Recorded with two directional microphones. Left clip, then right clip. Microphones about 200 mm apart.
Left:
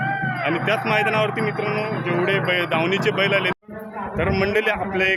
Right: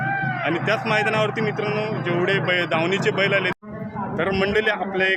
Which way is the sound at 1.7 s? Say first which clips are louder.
Left 1 dB; 35° left (ahead or behind).